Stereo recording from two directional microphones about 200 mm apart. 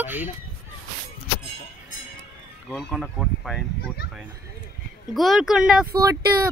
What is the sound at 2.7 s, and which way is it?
Speech, centre (ahead or behind).